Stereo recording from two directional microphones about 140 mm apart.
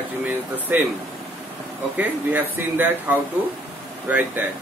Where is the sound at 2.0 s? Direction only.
15° right (ahead or behind).